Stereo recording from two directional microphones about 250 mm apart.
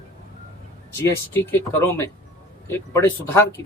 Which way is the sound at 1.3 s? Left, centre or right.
Centre.